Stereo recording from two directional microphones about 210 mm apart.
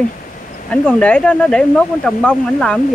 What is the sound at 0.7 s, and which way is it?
Speech, 5° left (ahead or behind).